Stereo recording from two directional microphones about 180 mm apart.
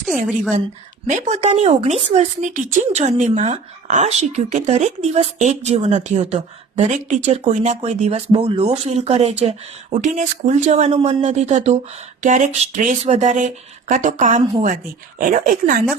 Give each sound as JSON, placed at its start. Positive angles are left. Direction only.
{"t": 1.1, "sound": "speech", "side_deg": -40}